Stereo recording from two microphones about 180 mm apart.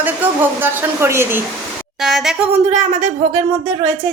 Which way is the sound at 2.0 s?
Centre (ahead or behind).